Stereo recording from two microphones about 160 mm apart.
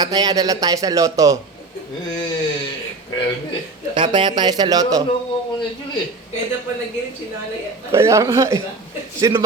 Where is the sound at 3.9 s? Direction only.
30° right (ahead or behind).